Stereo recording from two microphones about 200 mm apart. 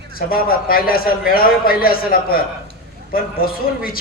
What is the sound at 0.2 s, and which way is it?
A man's voice, 45° left (ahead or behind).